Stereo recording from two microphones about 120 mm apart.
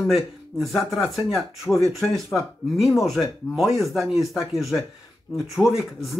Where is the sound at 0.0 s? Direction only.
Centre (ahead or behind).